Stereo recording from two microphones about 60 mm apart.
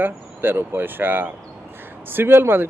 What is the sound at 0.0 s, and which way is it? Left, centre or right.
Speech, right.